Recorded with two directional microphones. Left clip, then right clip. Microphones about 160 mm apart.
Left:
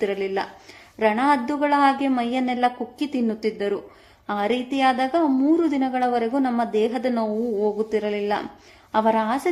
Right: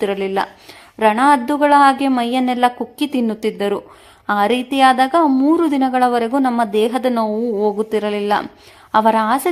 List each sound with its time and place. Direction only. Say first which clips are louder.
0.0 s a woman's voice: right 5 dB; 30° right (ahead or behind)